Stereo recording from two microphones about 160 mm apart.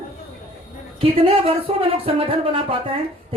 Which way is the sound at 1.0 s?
35° right (ahead or behind).